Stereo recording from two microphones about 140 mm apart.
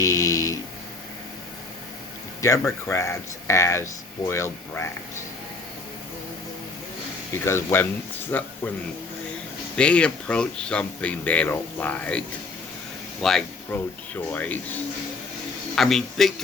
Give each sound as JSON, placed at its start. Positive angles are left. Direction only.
{"t": 0.0, "sound": "a sound", "side_deg": 25}
{"t": 2.4, "sound": "speech", "side_deg": 25}
{"t": 7.4, "sound": "speech", "side_deg": 15}
{"t": 9.7, "sound": "speech", "side_deg": 5}
{"t": 13.2, "sound": "a man's voice", "side_deg": 5}
{"t": 13.7, "sound": "speech", "side_deg": 15}
{"t": 15.7, "sound": "a man's voice", "side_deg": 0}